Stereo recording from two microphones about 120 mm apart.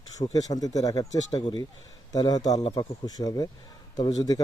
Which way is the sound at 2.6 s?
45° left (ahead or behind).